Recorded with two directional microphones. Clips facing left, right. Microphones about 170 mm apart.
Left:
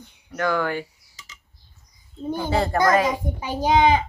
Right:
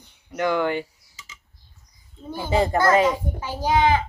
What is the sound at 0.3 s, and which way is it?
Speech, 20° right (ahead or behind).